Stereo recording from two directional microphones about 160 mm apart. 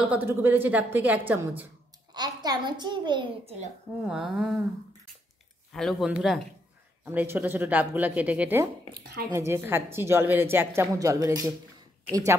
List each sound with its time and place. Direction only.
0.0 s a woman's voice: 10° right (ahead or behind)
2.1 s a child's voice: 25° right (ahead or behind)
4.0 s speech: 5° right (ahead or behind)
5.7 s a woman's voice: centre (ahead or behind); by 11.5 s 20° right (ahead or behind)